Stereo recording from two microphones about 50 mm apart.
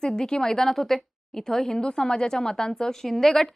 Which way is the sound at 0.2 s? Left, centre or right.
Centre.